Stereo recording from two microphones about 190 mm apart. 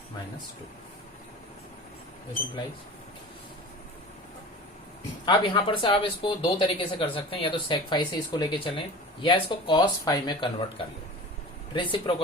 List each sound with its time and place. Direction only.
5.2 s speech: 25° left (ahead or behind)
11.7 s speech: 25° left (ahead or behind)